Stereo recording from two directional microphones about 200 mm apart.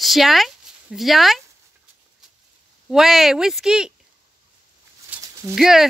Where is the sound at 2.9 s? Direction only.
Centre (ahead or behind).